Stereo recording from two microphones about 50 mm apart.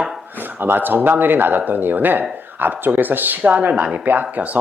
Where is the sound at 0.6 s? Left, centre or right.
Right.